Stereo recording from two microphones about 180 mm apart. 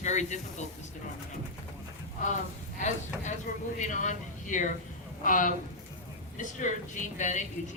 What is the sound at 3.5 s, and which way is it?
Speech, 50° left (ahead or behind).